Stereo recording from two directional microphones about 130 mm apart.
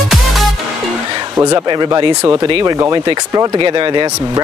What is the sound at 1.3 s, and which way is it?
Speech, 25° right (ahead or behind).